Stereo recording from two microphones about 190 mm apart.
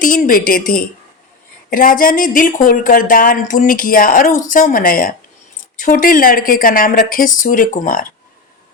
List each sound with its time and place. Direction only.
0.0 s speech: 45° left (ahead or behind)